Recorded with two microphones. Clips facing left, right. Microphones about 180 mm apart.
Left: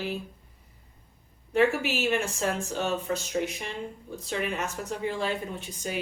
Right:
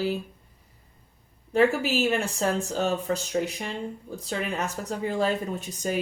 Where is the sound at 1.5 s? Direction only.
35° right (ahead or behind).